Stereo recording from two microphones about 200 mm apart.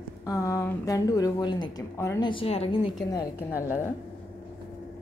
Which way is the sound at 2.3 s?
30° left (ahead or behind).